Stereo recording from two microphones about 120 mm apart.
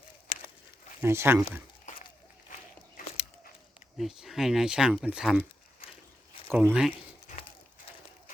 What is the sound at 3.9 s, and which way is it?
Speech, centre (ahead or behind).